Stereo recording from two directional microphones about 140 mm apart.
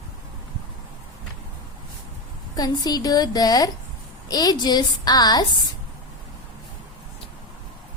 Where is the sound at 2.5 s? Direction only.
30° left (ahead or behind).